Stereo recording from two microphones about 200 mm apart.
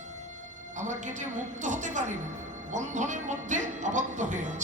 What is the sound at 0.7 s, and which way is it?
A woman's voice, 40° right (ahead or behind).